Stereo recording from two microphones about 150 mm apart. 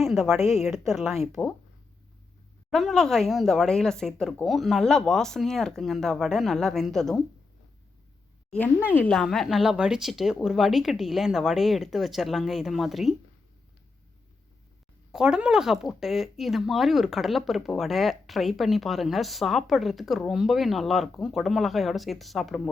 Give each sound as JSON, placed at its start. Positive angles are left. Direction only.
{"t": 0.0, "sound": "a sound", "side_deg": 0}
{"t": 0.3, "sound": "a woman's voice", "side_deg": 50}
{"t": 0.6, "sound": "speech", "side_deg": 0}
{"t": 2.6, "sound": "speech", "side_deg": 0}
{"t": 8.4, "sound": "speech", "side_deg": 10}
{"t": 15.1, "sound": "speech", "side_deg": -5}